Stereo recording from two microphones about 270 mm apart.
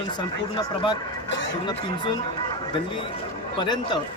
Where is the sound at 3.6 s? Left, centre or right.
Centre.